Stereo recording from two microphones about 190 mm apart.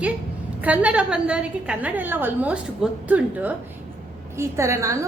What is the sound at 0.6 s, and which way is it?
A woman's voice, 5° right (ahead or behind).